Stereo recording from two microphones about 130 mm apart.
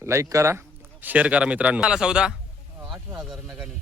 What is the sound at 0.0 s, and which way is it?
Speech, 25° right (ahead or behind).